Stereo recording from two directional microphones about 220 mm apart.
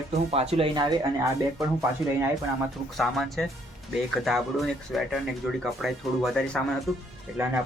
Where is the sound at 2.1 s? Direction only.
5° right (ahead or behind).